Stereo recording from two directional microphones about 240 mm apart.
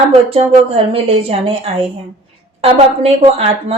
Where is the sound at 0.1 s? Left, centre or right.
Right.